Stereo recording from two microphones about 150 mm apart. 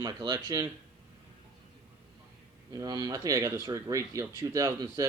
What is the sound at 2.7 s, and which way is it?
Speech, 25° right (ahead or behind).